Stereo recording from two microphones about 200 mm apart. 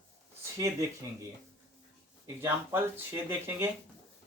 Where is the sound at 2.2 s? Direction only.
15° right (ahead or behind).